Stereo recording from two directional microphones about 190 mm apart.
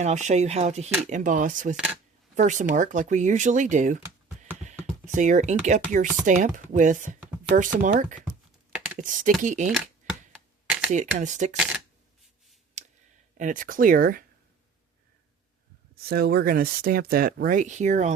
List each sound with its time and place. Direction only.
0.0 s speech: 40° right (ahead or behind)
1.7 s speech: 5° right (ahead or behind)
2.3 s speech: 40° right (ahead or behind)
4.6 s a sound: 40° right (ahead or behind)
5.6 s speech: 40° right (ahead or behind)
10.9 s speech: 40° right (ahead or behind)
12.8 s clicking: 40° right (ahead or behind)
13.3 s speech: 45° right (ahead or behind)
16.0 s speech: 55° right (ahead or behind)